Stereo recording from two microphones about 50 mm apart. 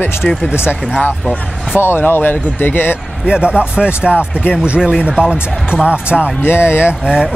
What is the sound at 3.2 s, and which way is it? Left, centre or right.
Speech, centre.